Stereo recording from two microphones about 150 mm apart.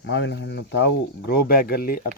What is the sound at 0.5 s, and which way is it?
Speech, 90° left.